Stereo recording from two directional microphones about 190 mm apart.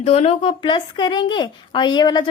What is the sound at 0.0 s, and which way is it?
Speech, 30° left (ahead or behind).